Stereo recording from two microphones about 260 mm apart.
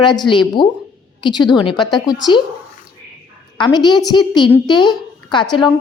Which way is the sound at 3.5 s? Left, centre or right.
Centre.